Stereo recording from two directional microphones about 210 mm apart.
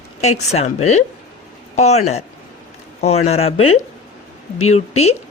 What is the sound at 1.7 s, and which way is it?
A woman's voice, 30° left (ahead or behind).